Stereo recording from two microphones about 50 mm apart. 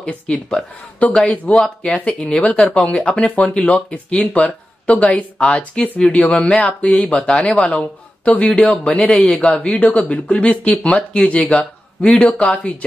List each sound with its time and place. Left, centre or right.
0.0 s speech: left